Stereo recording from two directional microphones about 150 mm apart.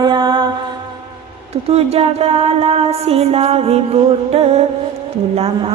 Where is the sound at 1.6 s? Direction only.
45° right (ahead or behind).